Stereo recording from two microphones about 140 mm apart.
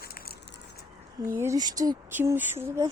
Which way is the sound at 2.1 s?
15° right (ahead or behind).